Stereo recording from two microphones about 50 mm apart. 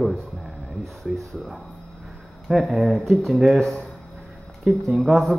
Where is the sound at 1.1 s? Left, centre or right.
Centre.